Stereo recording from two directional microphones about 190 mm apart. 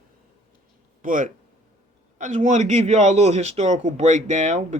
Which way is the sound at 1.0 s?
45° right (ahead or behind).